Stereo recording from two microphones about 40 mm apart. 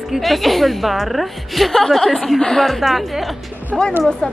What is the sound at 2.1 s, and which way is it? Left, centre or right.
Speech, centre.